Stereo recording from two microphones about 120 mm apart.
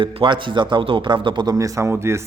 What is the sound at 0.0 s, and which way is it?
Speech, 45° right (ahead or behind).